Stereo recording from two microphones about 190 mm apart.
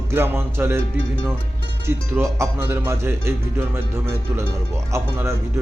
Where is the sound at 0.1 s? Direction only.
15° right (ahead or behind).